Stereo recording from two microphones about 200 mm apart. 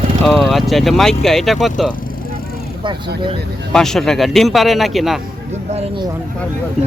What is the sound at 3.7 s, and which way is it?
Speech, centre (ahead or behind).